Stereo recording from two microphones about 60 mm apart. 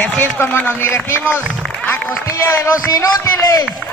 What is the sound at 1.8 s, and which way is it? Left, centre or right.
Music, left.